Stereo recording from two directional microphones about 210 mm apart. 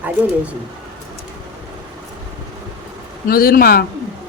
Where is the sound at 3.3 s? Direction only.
45° left (ahead or behind).